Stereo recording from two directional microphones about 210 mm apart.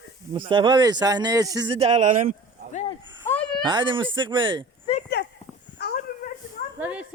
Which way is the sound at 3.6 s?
20° right (ahead or behind).